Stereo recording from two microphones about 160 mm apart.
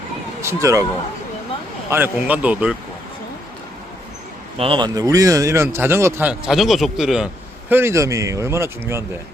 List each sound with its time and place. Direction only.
0.4 s speech: 20° right (ahead or behind)
1.9 s a man's voice: 10° right (ahead or behind)
4.5 s a man's voice: 35° right (ahead or behind); by 7.3 s 5° right (ahead or behind)
7.7 s a man's voice: 15° right (ahead or behind)